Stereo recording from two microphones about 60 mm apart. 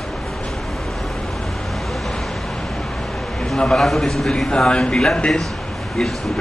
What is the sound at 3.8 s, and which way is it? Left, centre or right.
A man's voice, centre.